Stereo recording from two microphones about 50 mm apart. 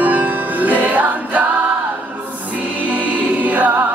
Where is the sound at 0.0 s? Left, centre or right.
Right.